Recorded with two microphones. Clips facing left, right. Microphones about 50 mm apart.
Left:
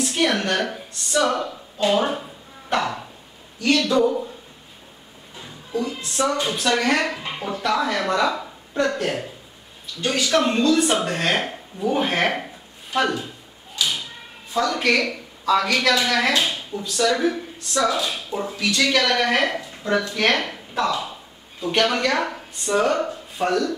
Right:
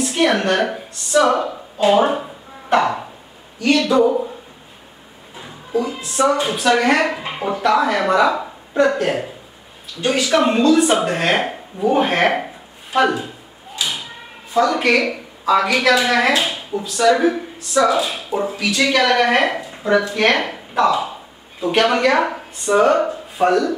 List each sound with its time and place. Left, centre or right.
0.0 s a woman's voice: centre
1.5 s a sound: centre
2.0 s speech: centre
5.4 s a woman's voice: centre
13.7 s a sound: centre
16.4 s speech: centre